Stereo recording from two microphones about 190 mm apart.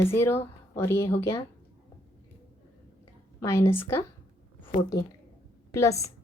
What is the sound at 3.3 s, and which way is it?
Speech, 15° left (ahead or behind).